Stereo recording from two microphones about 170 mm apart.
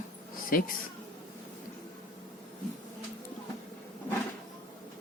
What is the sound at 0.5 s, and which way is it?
Speech, 55° left (ahead or behind).